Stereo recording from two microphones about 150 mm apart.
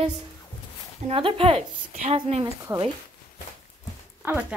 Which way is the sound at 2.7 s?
15° right (ahead or behind).